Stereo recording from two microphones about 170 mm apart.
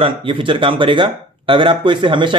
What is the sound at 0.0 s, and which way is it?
Speech, 30° right (ahead or behind).